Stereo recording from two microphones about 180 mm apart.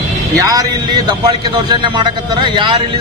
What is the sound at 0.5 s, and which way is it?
A man's voice, 20° right (ahead or behind).